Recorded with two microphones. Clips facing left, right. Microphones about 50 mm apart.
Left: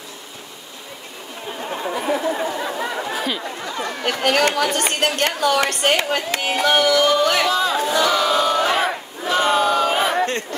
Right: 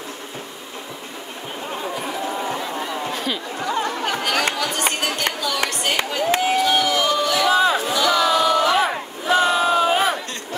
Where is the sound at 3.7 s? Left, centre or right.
Right.